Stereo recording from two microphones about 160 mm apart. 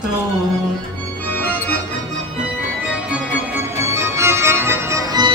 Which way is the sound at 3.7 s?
15° right (ahead or behind).